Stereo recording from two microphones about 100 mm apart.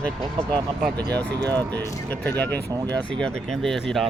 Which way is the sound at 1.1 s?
15° left (ahead or behind).